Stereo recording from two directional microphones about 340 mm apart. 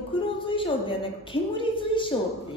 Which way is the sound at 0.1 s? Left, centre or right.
Centre.